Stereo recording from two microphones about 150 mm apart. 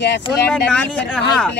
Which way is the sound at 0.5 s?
10° left (ahead or behind).